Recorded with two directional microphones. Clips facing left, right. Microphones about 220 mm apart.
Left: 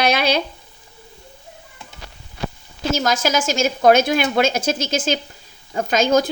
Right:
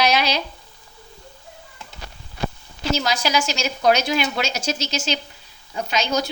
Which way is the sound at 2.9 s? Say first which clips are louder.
Left 3 dB; 45° left (ahead or behind).